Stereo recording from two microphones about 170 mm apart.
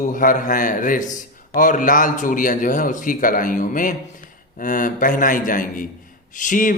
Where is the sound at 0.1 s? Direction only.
50° left (ahead or behind).